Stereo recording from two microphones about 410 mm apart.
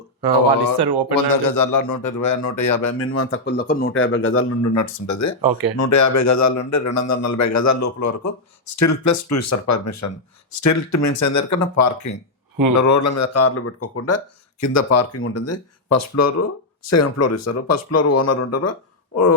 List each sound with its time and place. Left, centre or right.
0.8 s a man's voice: right
1.1 s a man's voice: left
3.0 s a man's voice: left